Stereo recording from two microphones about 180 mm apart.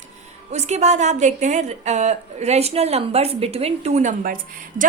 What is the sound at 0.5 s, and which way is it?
A woman's voice, 40° right (ahead or behind).